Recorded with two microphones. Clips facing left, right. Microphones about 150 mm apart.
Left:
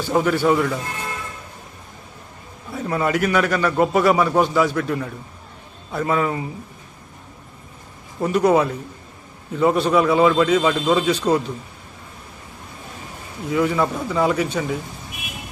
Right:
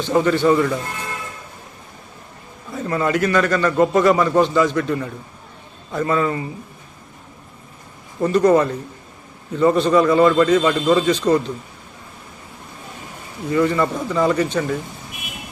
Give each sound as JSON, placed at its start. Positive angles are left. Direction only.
{"t": 0.0, "sound": "speech", "side_deg": 5}
{"t": 2.7, "sound": "a man's voice", "side_deg": 5}
{"t": 8.2, "sound": "a man's voice", "side_deg": 10}
{"t": 13.5, "sound": "a man's voice", "side_deg": 5}